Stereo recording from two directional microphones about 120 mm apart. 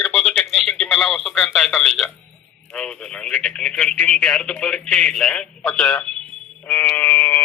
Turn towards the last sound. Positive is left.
turn(degrees=15)  # may be behind; listen again after turning